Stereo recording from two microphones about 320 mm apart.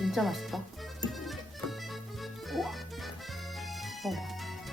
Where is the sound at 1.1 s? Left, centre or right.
Centre.